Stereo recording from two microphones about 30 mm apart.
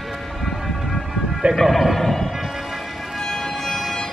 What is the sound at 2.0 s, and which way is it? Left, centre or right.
Music, centre.